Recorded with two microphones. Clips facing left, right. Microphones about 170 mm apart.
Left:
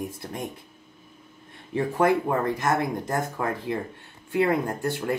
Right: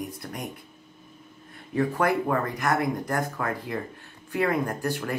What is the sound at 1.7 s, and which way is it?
Speech, 25° left (ahead or behind).